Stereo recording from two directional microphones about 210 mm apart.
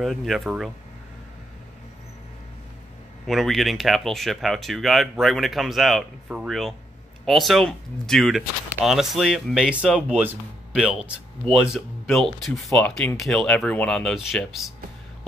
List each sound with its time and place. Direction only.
0.0 s speech: centre (ahead or behind)
3.3 s speech: centre (ahead or behind)